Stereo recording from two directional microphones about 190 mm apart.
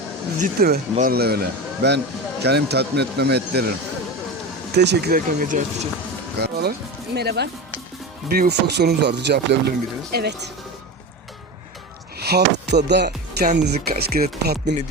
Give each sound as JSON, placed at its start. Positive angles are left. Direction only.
{"t": 0.3, "sound": "speech", "side_deg": -50}
{"t": 4.7, "sound": "speech", "side_deg": -60}
{"t": 6.4, "sound": "speech", "side_deg": -60}
{"t": 12.2, "sound": "speech", "side_deg": -60}
{"t": 13.7, "sound": "speech", "side_deg": -55}